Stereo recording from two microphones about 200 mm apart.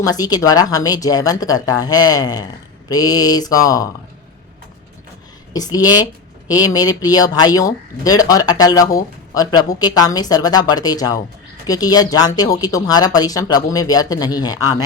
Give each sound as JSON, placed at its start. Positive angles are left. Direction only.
{"t": 0.0, "sound": "speech", "side_deg": 20}
{"t": 5.5, "sound": "speech", "side_deg": 20}